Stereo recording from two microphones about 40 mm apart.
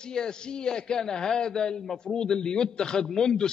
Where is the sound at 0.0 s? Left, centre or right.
Centre.